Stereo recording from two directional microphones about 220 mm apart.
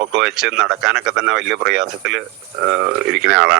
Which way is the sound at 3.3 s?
60° right (ahead or behind).